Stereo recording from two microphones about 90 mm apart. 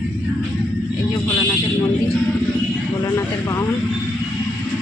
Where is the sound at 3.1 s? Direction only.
35° left (ahead or behind).